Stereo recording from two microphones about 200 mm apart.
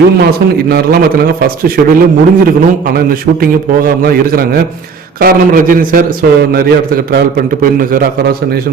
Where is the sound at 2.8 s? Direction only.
50° right (ahead or behind).